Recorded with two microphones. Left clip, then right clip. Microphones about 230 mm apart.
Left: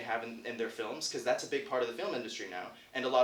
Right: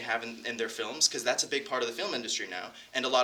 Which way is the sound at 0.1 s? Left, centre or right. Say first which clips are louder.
Right 4 dB; right.